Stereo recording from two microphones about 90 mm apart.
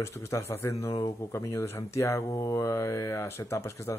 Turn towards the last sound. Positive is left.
turn(degrees=30)  # may be behind; listen again after turning